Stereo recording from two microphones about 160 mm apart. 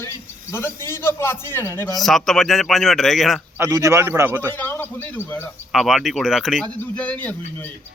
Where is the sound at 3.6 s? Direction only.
20° right (ahead or behind).